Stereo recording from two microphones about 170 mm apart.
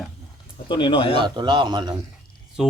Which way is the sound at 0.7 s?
30° left (ahead or behind).